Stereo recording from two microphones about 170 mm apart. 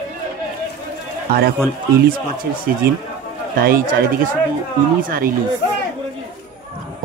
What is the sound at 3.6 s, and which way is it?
Speech, 55° right (ahead or behind).